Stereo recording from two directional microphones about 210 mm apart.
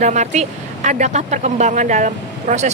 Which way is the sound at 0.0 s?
35° right (ahead or behind).